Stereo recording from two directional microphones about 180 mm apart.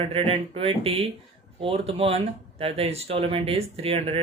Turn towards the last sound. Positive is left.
turn(degrees=-35)  # may be behind; listen again after turning